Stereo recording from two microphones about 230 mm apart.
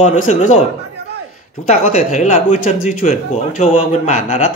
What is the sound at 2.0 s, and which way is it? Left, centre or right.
A man's voice, left.